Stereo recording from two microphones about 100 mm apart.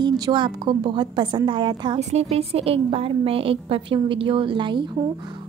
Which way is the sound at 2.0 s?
90° right.